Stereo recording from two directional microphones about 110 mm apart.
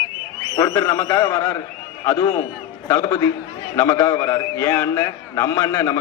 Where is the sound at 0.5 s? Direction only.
30° left (ahead or behind).